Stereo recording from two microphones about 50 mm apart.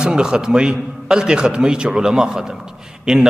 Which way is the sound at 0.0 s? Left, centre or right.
Centre.